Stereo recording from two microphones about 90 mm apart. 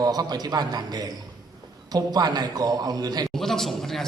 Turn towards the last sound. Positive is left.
turn(degrees=0)  # may be behind; listen again after turning